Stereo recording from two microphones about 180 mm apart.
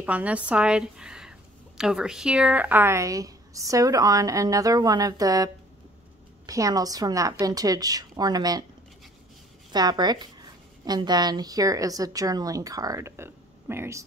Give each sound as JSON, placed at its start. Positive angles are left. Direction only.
{"t": 0.0, "sound": "a woman's voice", "side_deg": -10}
{"t": 9.7, "sound": "speech", "side_deg": -25}